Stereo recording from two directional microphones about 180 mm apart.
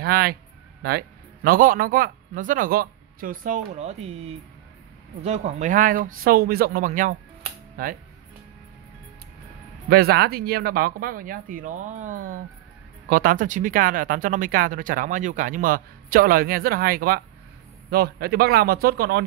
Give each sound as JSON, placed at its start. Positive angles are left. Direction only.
{"t": 0.0, "sound": "speech", "side_deg": -55}
{"t": 5.2, "sound": "speech", "side_deg": -35}
{"t": 9.8, "sound": "speech", "side_deg": -60}